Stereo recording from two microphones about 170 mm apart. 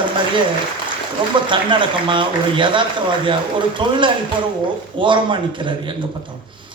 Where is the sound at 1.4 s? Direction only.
30° right (ahead or behind).